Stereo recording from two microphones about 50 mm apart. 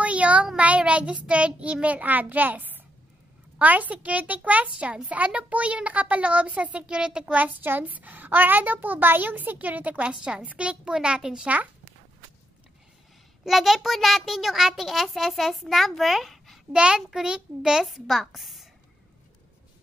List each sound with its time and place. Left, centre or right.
0.0 s a sound: right
0.6 s a child's voice: right
7.3 s a child's voice: right; by 11.4 s centre
11.4 s a child's voice: right
13.5 s a child's voice: centre
16.7 s a child's voice: centre
17.8 s a child's voice: centre